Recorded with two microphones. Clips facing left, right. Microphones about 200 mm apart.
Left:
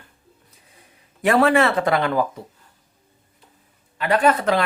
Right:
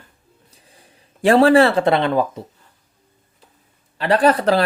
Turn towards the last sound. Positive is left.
turn(degrees=-35)  # may be behind; listen again after turning